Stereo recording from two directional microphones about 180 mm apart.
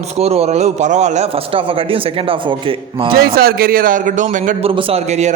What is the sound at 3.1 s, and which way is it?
A man's voice, 55° right (ahead or behind).